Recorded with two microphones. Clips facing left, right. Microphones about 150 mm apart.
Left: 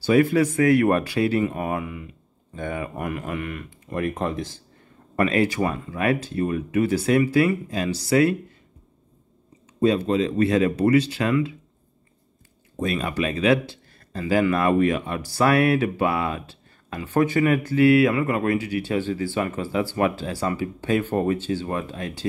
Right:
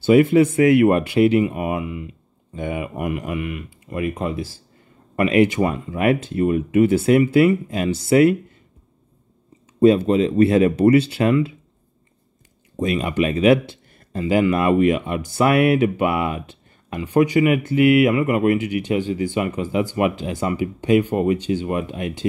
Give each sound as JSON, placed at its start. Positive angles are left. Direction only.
{"t": 0.0, "sound": "speech", "side_deg": -20}
{"t": 9.8, "sound": "speech", "side_deg": -30}
{"t": 12.8, "sound": "speech", "side_deg": -20}